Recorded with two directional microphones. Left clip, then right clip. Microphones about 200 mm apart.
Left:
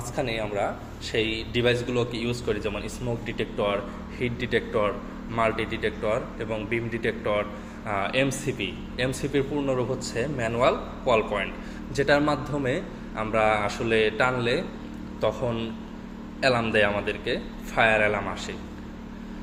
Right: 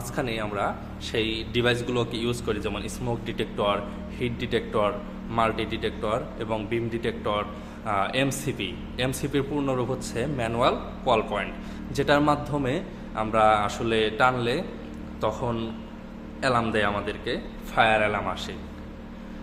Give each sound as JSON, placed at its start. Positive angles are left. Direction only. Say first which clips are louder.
{"t": 0.2, "sound": "a man's voice", "louder": "left 1 dB", "side_deg": -15}